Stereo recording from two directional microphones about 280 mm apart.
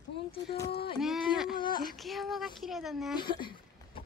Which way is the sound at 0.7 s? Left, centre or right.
Left.